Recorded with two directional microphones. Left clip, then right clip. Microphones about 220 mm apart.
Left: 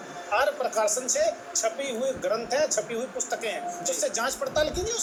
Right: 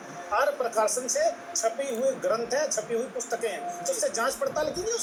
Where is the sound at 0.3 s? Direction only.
25° left (ahead or behind).